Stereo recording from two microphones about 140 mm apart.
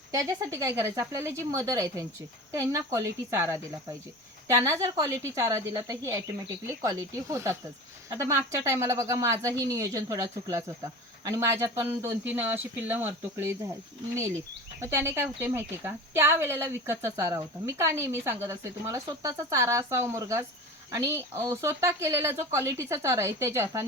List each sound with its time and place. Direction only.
0.1 s speech: 25° right (ahead or behind)
14.8 s speech: 20° right (ahead or behind)